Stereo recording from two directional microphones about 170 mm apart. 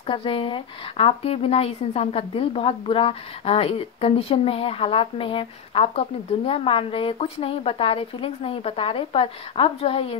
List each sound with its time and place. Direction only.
0.0 s speech: 30° left (ahead or behind)